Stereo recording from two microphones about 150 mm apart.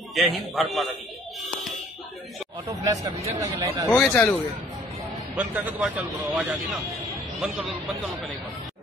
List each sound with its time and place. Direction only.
0.1 s a man's voice: centre (ahead or behind)
2.8 s speech: 25° right (ahead or behind)
3.9 s a man's voice: 5° left (ahead or behind)
5.3 s a man's voice: 5° right (ahead or behind)